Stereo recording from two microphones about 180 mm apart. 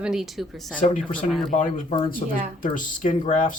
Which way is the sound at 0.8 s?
45° left (ahead or behind).